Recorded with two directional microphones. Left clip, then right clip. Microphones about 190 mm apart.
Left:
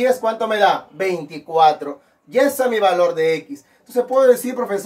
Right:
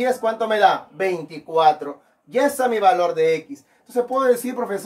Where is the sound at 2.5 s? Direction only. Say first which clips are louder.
Left 1 dB; 20° right (ahead or behind).